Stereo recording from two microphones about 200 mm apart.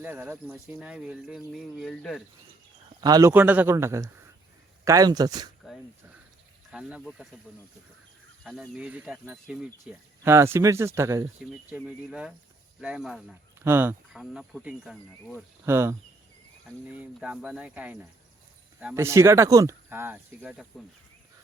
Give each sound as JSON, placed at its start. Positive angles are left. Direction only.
{"t": 0.0, "sound": "speech", "side_deg": -10}
{"t": 3.0, "sound": "speech", "side_deg": -20}
{"t": 6.7, "sound": "speech", "side_deg": -5}
{"t": 8.4, "sound": "speech", "side_deg": -5}
{"t": 13.7, "sound": "speech", "side_deg": -10}
{"t": 14.1, "sound": "speech", "side_deg": 0}